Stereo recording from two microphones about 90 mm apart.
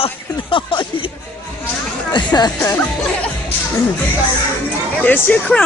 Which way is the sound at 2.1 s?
50° left (ahead or behind).